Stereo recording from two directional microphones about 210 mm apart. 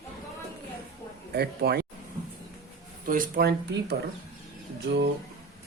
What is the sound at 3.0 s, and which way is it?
Speech, 40° right (ahead or behind).